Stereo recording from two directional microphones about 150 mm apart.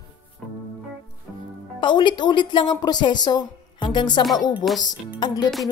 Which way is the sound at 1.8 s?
30° left (ahead or behind).